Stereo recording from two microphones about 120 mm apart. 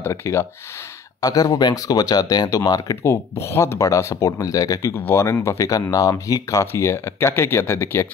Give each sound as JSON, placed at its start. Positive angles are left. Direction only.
{"t": 0.0, "sound": "speech", "side_deg": 25}
{"t": 4.9, "sound": "speech", "side_deg": 20}